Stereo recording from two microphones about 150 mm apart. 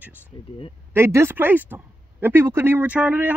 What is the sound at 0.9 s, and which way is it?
Speech, 15° right (ahead or behind).